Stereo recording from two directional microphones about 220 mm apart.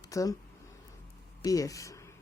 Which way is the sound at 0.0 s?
15° left (ahead or behind).